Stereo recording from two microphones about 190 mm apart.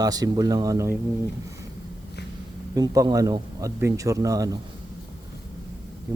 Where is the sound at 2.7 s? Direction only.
20° right (ahead or behind).